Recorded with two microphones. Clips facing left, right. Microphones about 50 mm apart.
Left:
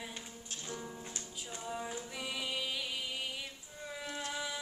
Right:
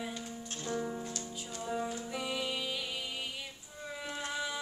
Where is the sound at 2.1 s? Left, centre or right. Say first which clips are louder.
Right 4 dB; centre.